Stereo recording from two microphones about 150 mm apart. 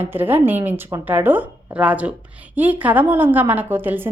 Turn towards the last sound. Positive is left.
turn(degrees=-15)  # may be behind; listen again after turning